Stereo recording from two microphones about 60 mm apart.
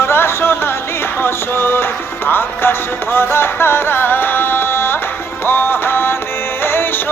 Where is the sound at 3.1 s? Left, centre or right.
Left.